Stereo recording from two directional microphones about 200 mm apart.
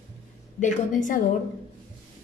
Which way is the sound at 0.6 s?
35° left (ahead or behind).